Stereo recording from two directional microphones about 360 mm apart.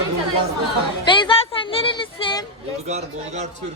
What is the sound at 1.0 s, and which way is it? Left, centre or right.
Music, centre.